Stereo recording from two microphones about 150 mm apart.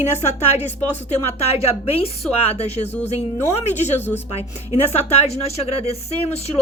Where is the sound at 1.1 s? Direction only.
45° left (ahead or behind).